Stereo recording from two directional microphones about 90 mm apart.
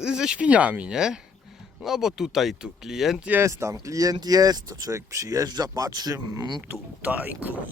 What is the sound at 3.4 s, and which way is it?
Speech, 35° right (ahead or behind).